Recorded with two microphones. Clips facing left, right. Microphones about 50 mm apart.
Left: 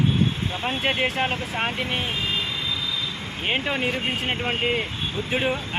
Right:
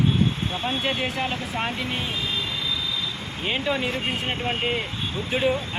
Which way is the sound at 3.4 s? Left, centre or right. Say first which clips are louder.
Even; left.